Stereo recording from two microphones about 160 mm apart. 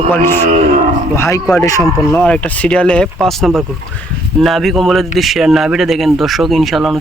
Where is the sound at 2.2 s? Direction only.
5° left (ahead or behind).